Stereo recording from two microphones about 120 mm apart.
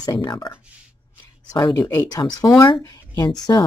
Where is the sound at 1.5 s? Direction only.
35° left (ahead or behind).